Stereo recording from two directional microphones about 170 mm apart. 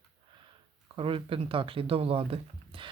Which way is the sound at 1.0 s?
30° right (ahead or behind).